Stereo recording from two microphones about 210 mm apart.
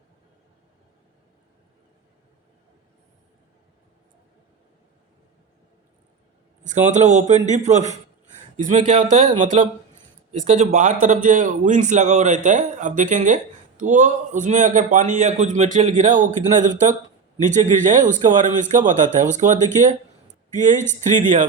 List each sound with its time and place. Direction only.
6.7 s a man's voice: 35° right (ahead or behind)